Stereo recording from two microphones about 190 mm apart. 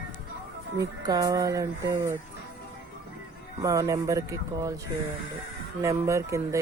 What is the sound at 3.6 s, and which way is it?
Speech, 15° right (ahead or behind).